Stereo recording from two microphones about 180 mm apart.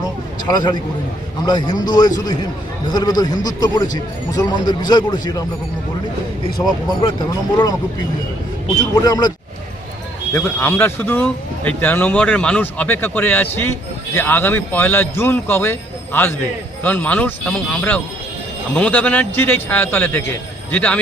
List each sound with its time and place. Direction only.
0.4 s a man's voice: 20° left (ahead or behind)
6.6 s speech: 5° left (ahead or behind)
9.0 s a man's voice: 20° left (ahead or behind)
10.3 s speech: 10° left (ahead or behind)